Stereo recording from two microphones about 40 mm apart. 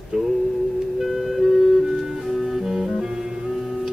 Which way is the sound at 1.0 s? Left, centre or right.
Centre.